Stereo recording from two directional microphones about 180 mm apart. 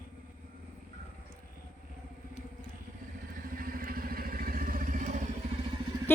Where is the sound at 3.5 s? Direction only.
55° right (ahead or behind).